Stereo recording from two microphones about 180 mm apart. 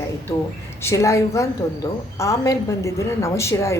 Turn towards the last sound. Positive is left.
turn(degrees=15)  # may be behind; listen again after turning